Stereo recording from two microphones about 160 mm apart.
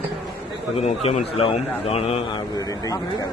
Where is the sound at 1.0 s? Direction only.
40° left (ahead or behind).